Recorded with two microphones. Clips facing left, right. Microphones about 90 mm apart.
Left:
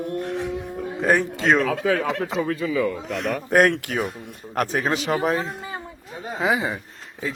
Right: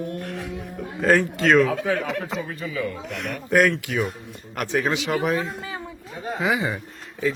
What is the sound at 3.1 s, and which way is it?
Speech, 35° left (ahead or behind).